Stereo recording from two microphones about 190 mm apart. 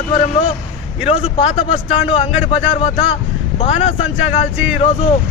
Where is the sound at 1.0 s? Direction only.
30° left (ahead or behind).